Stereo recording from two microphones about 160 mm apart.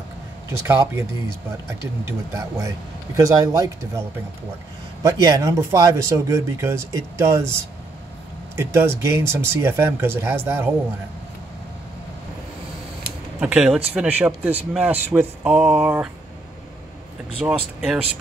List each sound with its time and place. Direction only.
0.5 s speech: 15° right (ahead or behind)
2.3 s speech: 20° right (ahead or behind)
13.4 s speech: 5° right (ahead or behind)
17.4 s speech: 5° right (ahead or behind)